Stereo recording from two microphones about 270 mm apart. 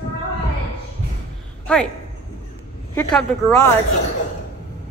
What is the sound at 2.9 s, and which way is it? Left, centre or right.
Speech, centre.